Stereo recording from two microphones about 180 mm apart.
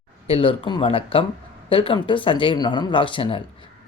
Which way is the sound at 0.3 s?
30° left (ahead or behind).